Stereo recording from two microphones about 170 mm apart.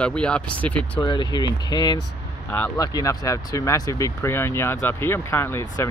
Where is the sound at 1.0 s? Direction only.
25° left (ahead or behind).